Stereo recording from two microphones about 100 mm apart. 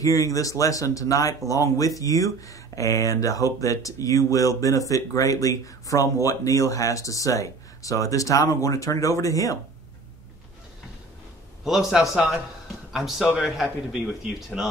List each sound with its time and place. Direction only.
0.0 s speech: 35° left (ahead or behind)
11.6 s a man's voice: 5° right (ahead or behind)